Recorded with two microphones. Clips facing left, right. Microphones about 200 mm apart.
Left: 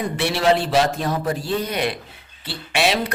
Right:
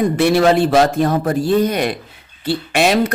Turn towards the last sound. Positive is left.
turn(degrees=-45)  # may be behind; listen again after turning